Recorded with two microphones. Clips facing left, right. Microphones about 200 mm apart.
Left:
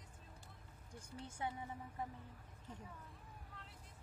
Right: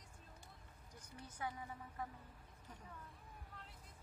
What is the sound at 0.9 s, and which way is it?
Speech, 25° left (ahead or behind).